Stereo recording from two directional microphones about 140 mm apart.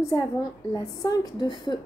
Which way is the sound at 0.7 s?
25° left (ahead or behind).